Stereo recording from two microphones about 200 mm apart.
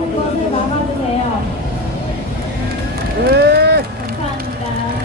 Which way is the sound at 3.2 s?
50° right (ahead or behind).